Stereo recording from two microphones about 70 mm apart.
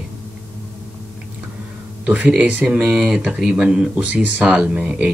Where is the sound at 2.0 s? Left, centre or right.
Right.